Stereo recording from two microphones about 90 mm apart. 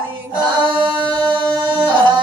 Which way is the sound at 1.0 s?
60° right (ahead or behind).